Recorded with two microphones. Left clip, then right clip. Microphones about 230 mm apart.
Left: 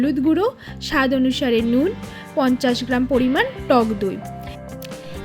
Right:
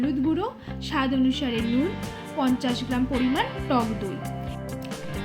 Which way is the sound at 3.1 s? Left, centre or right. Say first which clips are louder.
Left 9 dB; centre.